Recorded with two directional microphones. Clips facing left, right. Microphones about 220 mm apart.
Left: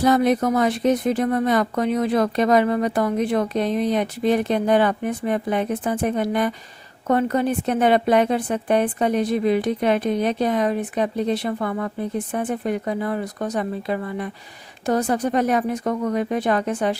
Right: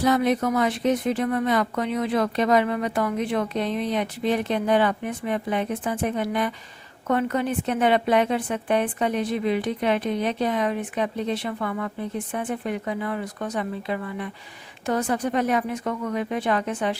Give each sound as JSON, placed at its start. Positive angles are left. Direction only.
{"t": 0.0, "sound": "a woman's voice", "side_deg": 40}